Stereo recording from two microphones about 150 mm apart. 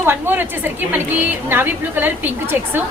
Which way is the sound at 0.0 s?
15° right (ahead or behind).